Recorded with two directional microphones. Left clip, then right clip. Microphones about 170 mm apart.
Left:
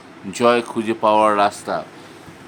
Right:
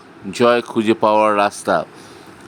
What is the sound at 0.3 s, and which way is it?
Speech, 25° right (ahead or behind).